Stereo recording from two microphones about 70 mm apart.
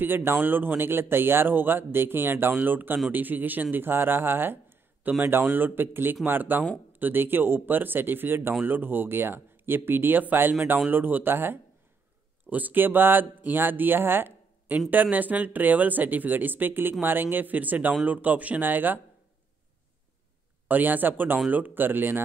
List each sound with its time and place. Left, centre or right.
0.0 s speech: right
20.6 s speech: right